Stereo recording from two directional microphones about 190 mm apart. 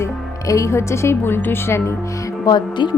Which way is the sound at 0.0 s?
15° left (ahead or behind).